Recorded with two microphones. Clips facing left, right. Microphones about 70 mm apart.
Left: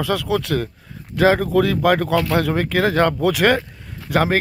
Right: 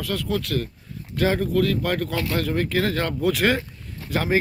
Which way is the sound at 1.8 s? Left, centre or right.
Left.